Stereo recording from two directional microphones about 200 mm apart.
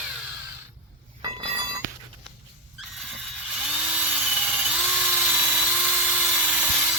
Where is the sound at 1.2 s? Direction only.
25° right (ahead or behind).